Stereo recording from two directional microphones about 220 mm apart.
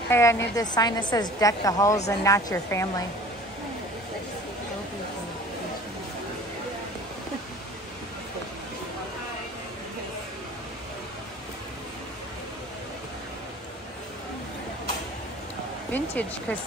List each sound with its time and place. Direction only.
0.1 s a woman's voice: 10° left (ahead or behind)
15.9 s a woman's voice: 5° left (ahead or behind)